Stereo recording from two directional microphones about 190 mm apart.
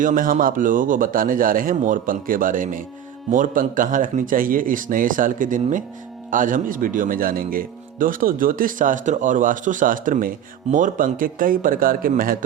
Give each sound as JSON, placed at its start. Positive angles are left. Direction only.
{"t": 0.0, "sound": "speech", "side_deg": -45}